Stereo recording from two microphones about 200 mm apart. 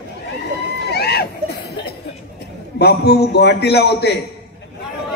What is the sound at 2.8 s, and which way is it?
A man's voice, 55° left (ahead or behind).